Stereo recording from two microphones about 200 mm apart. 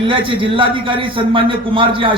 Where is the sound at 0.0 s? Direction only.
25° right (ahead or behind).